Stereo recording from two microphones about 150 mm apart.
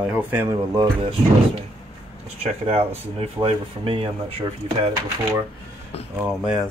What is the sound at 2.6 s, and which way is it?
Speech, 40° right (ahead or behind).